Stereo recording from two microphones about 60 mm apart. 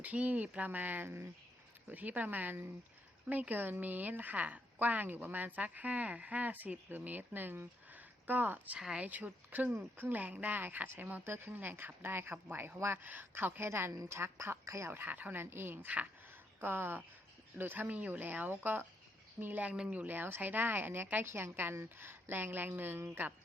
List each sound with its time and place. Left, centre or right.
0.0 s a woman's voice: right
14.9 s a woman's voice: right
15.4 s a woman's voice: right